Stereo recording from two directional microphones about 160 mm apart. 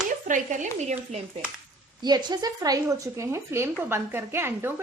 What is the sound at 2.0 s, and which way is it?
A woman's voice, 25° right (ahead or behind).